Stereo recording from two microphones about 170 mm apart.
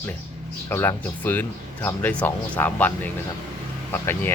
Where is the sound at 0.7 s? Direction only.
10° left (ahead or behind).